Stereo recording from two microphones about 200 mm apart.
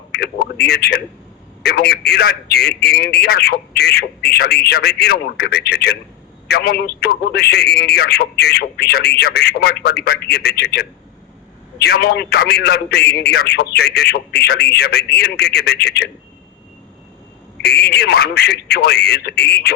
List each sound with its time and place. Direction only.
0.1 s a man's voice: 55° left (ahead or behind)
17.6 s a man's voice: 55° left (ahead or behind)